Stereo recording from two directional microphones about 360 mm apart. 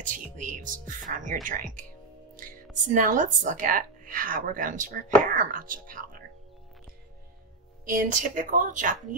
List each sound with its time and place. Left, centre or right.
0.0 s speech: right
7.9 s speech: right